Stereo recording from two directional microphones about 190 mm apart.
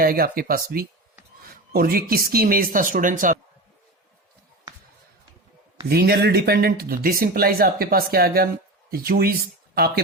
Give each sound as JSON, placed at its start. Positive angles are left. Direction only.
{"t": 0.0, "sound": "speech", "side_deg": -50}
{"t": 5.9, "sound": "speech", "side_deg": -55}